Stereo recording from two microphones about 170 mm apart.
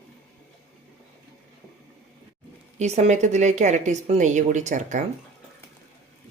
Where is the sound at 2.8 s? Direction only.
40° right (ahead or behind).